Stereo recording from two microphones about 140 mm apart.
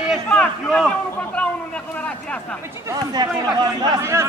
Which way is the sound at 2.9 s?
30° right (ahead or behind).